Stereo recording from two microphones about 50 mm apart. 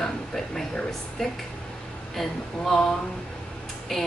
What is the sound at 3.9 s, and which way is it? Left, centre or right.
Speech, centre.